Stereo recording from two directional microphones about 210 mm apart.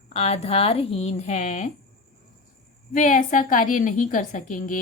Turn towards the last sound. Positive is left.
turn(degrees=40)  # may be behind; listen again after turning